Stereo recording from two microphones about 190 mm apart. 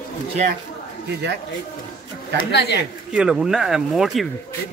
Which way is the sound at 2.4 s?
60° left (ahead or behind).